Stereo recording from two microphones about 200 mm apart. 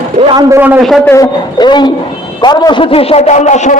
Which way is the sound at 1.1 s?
20° left (ahead or behind).